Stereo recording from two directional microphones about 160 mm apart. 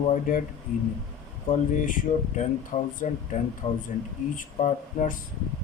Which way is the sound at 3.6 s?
35° left (ahead or behind).